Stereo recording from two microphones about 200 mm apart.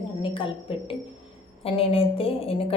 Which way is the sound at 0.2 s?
25° left (ahead or behind).